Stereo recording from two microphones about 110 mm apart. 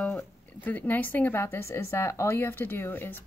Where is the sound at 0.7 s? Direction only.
15° left (ahead or behind).